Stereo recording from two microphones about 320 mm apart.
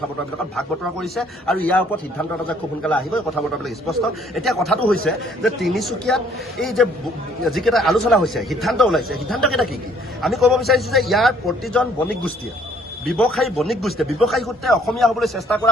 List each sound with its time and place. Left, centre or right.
0.5 s a man's voice: centre